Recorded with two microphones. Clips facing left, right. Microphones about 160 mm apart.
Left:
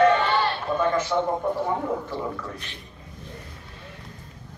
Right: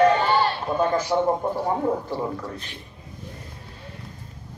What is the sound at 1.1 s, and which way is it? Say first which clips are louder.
Speech: right 2 dB; 35° right (ahead or behind).